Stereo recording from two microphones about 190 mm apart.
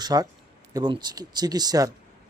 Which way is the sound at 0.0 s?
20° right (ahead or behind).